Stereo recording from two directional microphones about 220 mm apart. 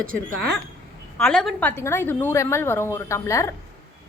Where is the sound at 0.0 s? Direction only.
40° right (ahead or behind).